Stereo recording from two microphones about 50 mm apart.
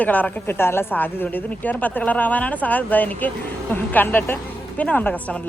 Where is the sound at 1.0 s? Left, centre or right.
Left.